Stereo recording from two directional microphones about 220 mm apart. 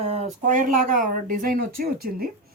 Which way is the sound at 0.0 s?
30° right (ahead or behind).